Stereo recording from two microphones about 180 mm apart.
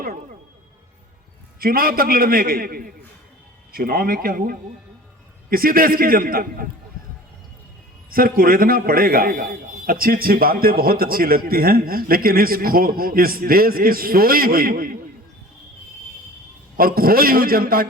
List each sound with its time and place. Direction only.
0.0 s music: 55° right (ahead or behind)
1.5 s a man's voice: 55° right (ahead or behind)
8.1 s a man's voice: 55° right (ahead or behind)
16.7 s a man's voice: 55° right (ahead or behind)